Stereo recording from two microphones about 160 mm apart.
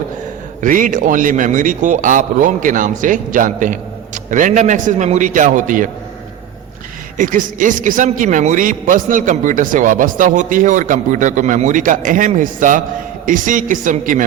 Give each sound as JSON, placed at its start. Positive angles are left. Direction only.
{"t": 0.6, "sound": "a man's voice", "side_deg": -55}
{"t": 7.2, "sound": "a man's voice", "side_deg": -55}